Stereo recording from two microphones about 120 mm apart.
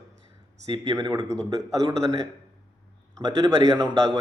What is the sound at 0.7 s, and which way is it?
Speech, 35° right (ahead or behind).